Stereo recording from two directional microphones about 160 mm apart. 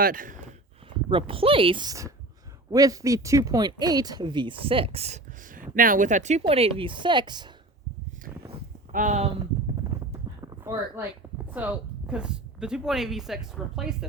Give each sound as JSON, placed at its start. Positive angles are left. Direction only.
{"t": 0.0, "sound": "speech", "side_deg": -60}
{"t": 1.1, "sound": "speech", "side_deg": -35}
{"t": 5.7, "sound": "speech", "side_deg": -60}
{"t": 6.4, "sound": "speech", "side_deg": -35}
{"t": 8.5, "sound": "a sound", "side_deg": -60}
{"t": 9.9, "sound": "clip-clop", "side_deg": -20}
{"t": 10.4, "sound": "a sound", "side_deg": -20}
{"t": 11.5, "sound": "speech", "side_deg": -10}